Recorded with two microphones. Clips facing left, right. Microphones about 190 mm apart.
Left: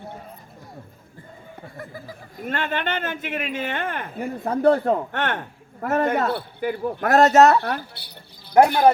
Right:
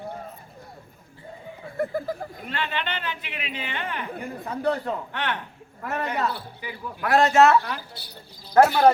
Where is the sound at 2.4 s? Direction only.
45° left (ahead or behind).